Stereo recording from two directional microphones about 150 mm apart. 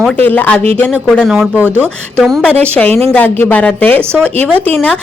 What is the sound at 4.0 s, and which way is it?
Speech, 15° right (ahead or behind).